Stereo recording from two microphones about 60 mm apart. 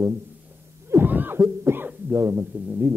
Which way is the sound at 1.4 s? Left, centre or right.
Right.